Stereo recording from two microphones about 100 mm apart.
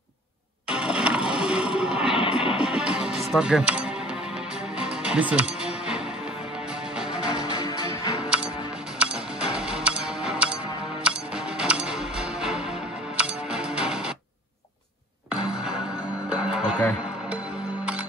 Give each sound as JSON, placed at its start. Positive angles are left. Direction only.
{"t": 0.7, "sound": "music", "side_deg": -10}
{"t": 3.3, "sound": "speech", "side_deg": -5}
{"t": 4.7, "sound": "music", "side_deg": -10}
{"t": 7.0, "sound": "music", "side_deg": -10}
{"t": 7.5, "sound": "music", "side_deg": -55}
{"t": 8.9, "sound": "music", "side_deg": -10}
{"t": 15.5, "sound": "music", "side_deg": -10}